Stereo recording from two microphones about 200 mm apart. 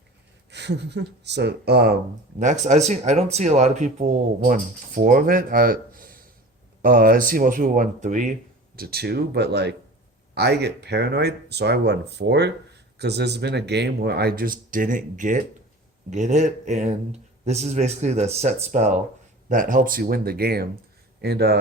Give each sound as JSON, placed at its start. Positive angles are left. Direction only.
{"t": 0.5, "sound": "speech", "side_deg": -60}
{"t": 2.4, "sound": "speech", "side_deg": -35}